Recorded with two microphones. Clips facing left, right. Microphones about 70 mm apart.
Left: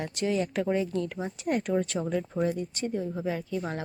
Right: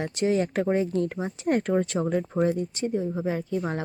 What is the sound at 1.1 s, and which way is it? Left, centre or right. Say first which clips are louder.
Speech: right 3 dB; right.